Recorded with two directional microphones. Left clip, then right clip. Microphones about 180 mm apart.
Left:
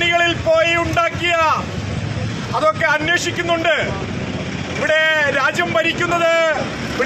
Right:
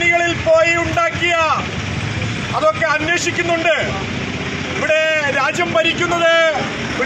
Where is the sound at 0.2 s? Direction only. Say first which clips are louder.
Right 1 dB; 35° left (ahead or behind).